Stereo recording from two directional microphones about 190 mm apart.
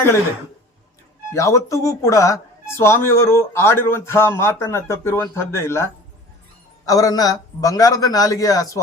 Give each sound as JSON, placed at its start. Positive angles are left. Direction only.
{"t": 1.3, "sound": "a woman's voice", "side_deg": 15}